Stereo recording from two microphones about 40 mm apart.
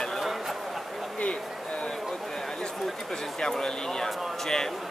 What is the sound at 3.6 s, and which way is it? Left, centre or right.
Speech, centre.